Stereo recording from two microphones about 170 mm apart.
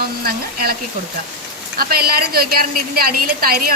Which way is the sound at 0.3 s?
60° right (ahead or behind).